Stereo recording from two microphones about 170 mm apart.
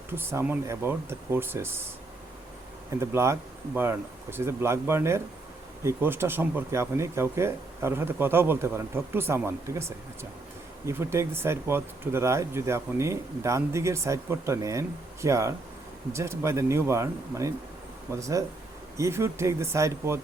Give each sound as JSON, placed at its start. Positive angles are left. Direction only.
{"t": 0.1, "sound": "speech", "side_deg": -15}
{"t": 3.0, "sound": "speech", "side_deg": -15}